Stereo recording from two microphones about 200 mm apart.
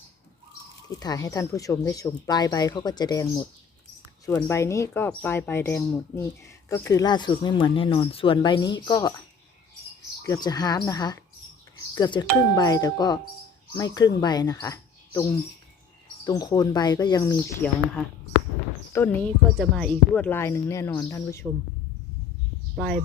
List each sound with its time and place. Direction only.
0.9 s speech: 20° left (ahead or behind)
10.2 s speech: 20° left (ahead or behind)
18.9 s speech: 10° left (ahead or behind)